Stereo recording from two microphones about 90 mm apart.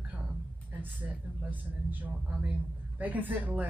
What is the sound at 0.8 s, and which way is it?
A woman's voice, 20° right (ahead or behind).